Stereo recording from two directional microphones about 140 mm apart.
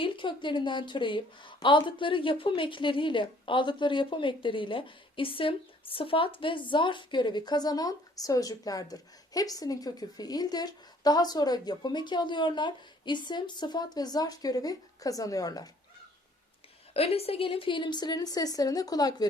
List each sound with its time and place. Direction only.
0.0 s a woman's voice: 35° left (ahead or behind)
16.9 s a woman's voice: 45° left (ahead or behind); by 19.3 s 30° left (ahead or behind)